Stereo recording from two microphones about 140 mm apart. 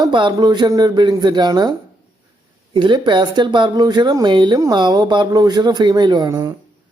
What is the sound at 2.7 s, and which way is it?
Speech, 35° right (ahead or behind).